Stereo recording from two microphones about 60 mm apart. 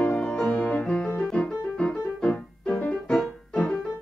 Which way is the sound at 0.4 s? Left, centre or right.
Centre.